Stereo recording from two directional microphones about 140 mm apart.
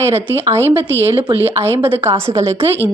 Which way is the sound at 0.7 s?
15° right (ahead or behind).